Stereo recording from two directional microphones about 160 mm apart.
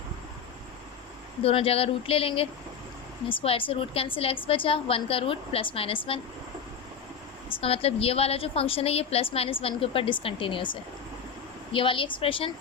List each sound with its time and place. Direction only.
1.4 s a woman's voice: 35° left (ahead or behind)
7.6 s a woman's voice: 40° left (ahead or behind)